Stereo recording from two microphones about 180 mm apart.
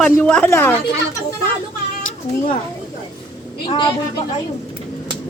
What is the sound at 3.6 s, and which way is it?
Speech, 25° left (ahead or behind).